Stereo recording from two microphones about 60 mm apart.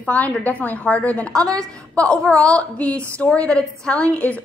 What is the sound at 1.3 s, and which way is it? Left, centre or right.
A woman's voice, centre.